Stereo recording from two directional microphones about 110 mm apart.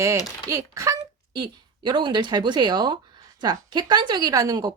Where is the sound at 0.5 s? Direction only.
30° right (ahead or behind).